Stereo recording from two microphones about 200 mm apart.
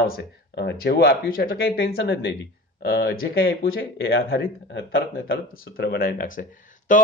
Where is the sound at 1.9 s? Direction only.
60° left (ahead or behind).